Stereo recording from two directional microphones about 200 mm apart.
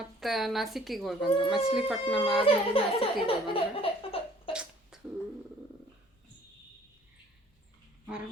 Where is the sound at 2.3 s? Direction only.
25° left (ahead or behind).